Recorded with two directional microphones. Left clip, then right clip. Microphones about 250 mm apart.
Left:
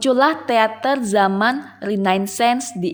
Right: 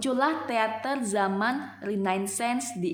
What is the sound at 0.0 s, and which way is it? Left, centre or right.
A woman's voice, left.